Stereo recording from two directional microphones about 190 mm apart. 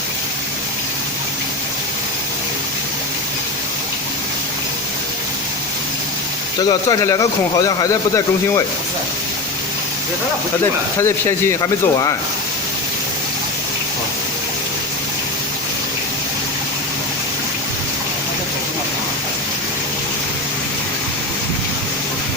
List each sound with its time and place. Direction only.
6.6 s speech: 20° left (ahead or behind)
11.0 s a man's voice: 15° left (ahead or behind)